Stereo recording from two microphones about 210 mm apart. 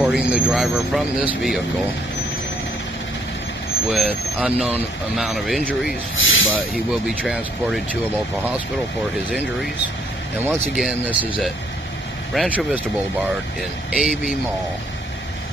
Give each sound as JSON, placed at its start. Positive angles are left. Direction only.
{"t": 0.0, "sound": "speech", "side_deg": 0}
{"t": 3.9, "sound": "speech", "side_deg": -5}
{"t": 6.1, "sound": "speech", "side_deg": 70}
{"t": 6.5, "sound": "speech", "side_deg": 0}
{"t": 10.4, "sound": "speech", "side_deg": -5}
{"t": 13.9, "sound": "speech", "side_deg": 0}